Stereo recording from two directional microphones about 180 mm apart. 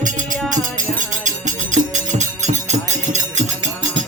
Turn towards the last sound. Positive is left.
turn(degrees=-40)  # may be behind; listen again after turning